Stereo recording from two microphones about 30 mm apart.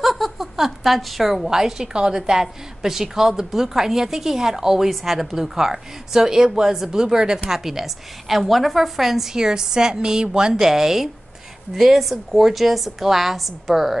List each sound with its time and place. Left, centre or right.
0.0 s a sound: centre
0.4 s a woman's voice: centre
9.3 s a woman's voice: right; by 13.7 s centre